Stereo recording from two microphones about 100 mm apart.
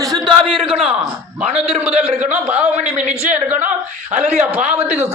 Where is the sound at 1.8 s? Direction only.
15° right (ahead or behind).